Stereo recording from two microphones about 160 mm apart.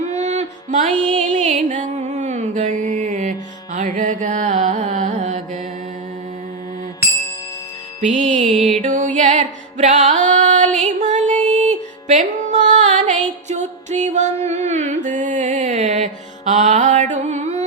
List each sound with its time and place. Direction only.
0.2 s music: 45° right (ahead or behind)
8.0 s music: 50° right (ahead or behind)
8.5 s music: centre (ahead or behind)
8.8 s music: 55° right (ahead or behind)